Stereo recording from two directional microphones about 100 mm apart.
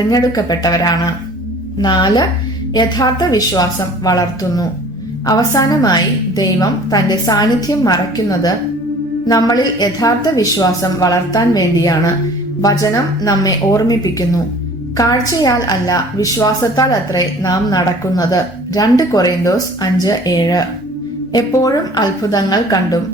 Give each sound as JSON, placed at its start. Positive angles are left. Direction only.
{"t": 0.1, "sound": "a woman's voice", "side_deg": 40}